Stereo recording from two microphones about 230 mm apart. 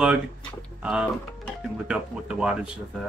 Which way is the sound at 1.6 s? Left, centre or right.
Centre.